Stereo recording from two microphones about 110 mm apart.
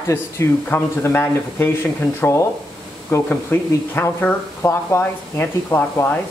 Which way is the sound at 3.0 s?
20° left (ahead or behind).